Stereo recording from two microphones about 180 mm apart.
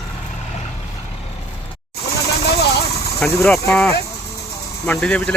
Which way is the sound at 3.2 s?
5° left (ahead or behind).